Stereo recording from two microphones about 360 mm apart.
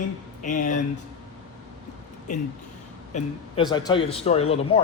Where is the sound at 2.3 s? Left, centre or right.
Centre.